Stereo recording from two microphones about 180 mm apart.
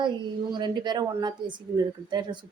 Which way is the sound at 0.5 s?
25° right (ahead or behind).